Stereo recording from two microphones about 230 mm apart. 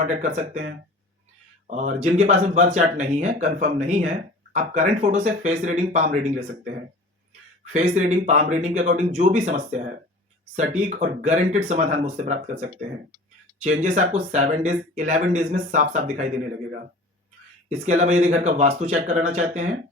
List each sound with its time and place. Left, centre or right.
0.0 s speech: right
1.7 s speech: right
7.7 s speech: right
17.8 s speech: right